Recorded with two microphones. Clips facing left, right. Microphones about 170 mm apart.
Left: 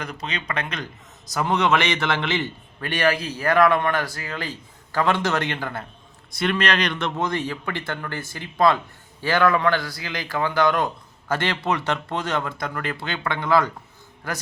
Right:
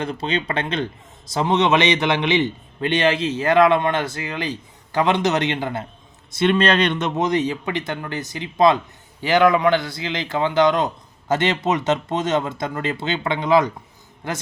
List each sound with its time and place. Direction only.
0.0 s speech: 30° right (ahead or behind)